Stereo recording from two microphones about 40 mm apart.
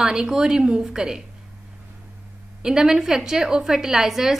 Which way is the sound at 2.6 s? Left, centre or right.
Centre.